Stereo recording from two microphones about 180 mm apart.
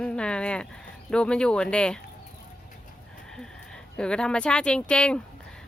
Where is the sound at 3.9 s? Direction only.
5° left (ahead or behind).